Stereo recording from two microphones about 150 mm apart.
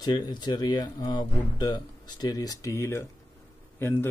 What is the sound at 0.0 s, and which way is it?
Speech, 30° left (ahead or behind).